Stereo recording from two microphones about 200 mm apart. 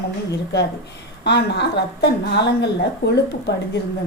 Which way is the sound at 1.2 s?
55° left (ahead or behind).